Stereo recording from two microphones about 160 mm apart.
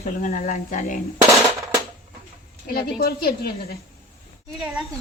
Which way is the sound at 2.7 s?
70° left (ahead or behind).